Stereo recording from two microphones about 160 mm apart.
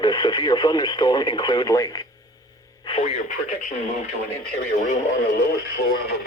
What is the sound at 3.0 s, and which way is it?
Speech, 50° left (ahead or behind).